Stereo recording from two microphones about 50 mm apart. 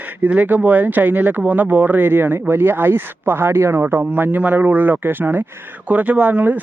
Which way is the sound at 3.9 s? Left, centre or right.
Right.